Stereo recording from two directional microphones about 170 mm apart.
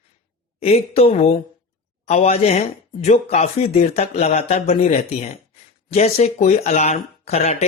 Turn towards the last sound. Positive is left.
turn(degrees=40)  # may be behind; listen again after turning